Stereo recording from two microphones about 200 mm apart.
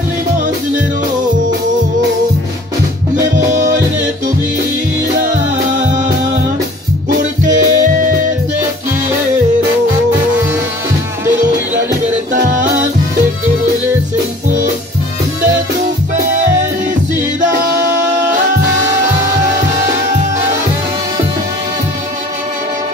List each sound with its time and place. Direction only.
3.3 s music: 40° right (ahead or behind)
7.4 s music: 40° right (ahead or behind)